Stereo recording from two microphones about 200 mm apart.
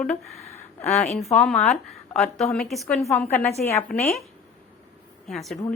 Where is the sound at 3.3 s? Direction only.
35° left (ahead or behind).